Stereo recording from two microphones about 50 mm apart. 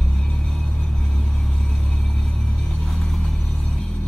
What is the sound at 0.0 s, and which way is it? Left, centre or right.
Music, centre.